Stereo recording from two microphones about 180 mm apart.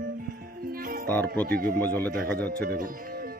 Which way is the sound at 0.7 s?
55° right (ahead or behind).